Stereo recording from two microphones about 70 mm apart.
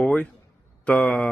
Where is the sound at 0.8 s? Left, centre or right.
Centre.